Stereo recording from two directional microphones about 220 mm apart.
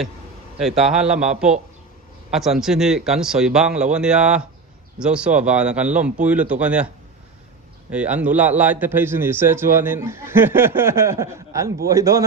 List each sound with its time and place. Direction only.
0.6 s speech: centre (ahead or behind)
7.9 s a man's voice: 5° right (ahead or behind)